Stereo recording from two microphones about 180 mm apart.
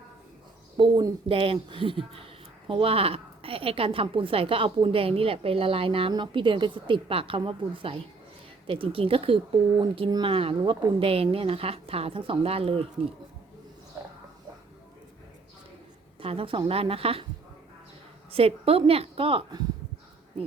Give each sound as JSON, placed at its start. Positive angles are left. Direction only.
{"t": 0.8, "sound": "a woman's voice", "side_deg": -25}
{"t": 16.2, "sound": "a woman's voice", "side_deg": -30}
{"t": 18.3, "sound": "a woman's voice", "side_deg": -30}